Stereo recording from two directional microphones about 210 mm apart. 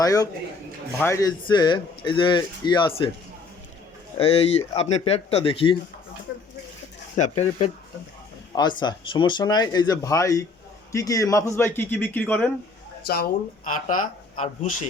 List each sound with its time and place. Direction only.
0.0 s a man's voice: 15° left (ahead or behind)
4.7 s speech: 30° left (ahead or behind)
7.2 s speech: 35° left (ahead or behind)
8.5 s a man's voice: 20° left (ahead or behind)
13.0 s speech: 45° left (ahead or behind)